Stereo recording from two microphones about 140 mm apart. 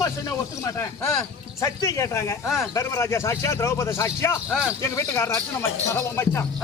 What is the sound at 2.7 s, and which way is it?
Speech, 20° left (ahead or behind).